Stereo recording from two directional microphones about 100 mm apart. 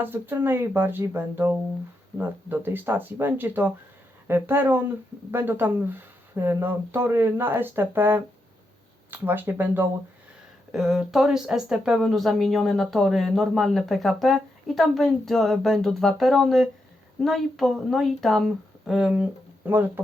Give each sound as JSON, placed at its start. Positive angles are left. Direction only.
{"t": 0.0, "sound": "speech", "side_deg": -20}
{"t": 10.7, "sound": "speech", "side_deg": -5}